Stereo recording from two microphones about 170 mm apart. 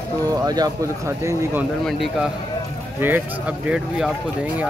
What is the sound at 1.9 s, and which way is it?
A man's voice, centre (ahead or behind).